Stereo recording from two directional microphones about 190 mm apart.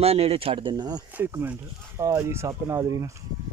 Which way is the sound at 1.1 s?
10° right (ahead or behind).